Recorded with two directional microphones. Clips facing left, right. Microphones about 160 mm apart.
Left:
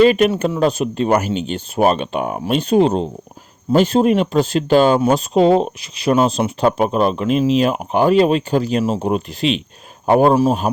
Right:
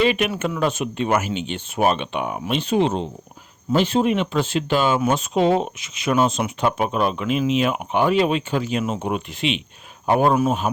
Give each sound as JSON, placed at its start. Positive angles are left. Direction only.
{"t": 0.0, "sound": "speech", "side_deg": 40}